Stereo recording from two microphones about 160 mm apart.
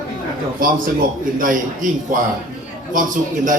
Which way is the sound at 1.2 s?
55° right (ahead or behind).